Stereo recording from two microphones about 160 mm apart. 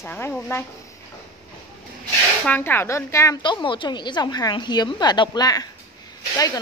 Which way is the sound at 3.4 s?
30° left (ahead or behind).